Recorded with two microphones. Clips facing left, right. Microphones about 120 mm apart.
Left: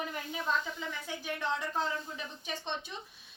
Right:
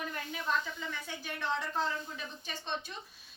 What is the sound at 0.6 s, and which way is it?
A woman's voice, 5° left (ahead or behind).